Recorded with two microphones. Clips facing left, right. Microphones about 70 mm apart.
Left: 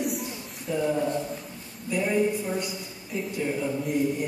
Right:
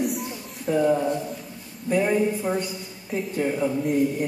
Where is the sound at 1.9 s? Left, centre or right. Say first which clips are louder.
Right 3 dB; right.